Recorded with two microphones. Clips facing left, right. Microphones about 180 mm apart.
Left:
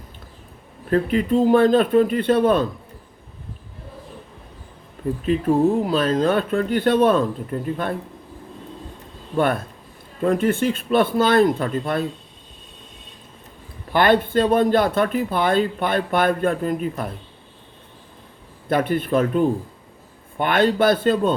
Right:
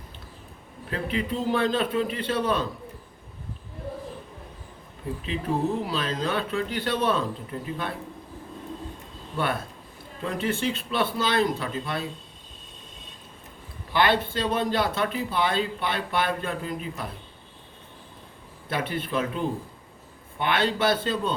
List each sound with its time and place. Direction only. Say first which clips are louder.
0.9 s speech: left 10 dB; 45° left (ahead or behind)
5.8 s speech: left 9 dB; 50° left (ahead or behind)
9.3 s speech: left 8 dB; 50° left (ahead or behind)
13.9 s speech: left 7 dB; 50° left (ahead or behind)
18.7 s speech: left 9 dB; 50° left (ahead or behind)